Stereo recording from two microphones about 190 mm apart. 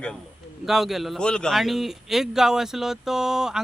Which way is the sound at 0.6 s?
Centre (ahead or behind).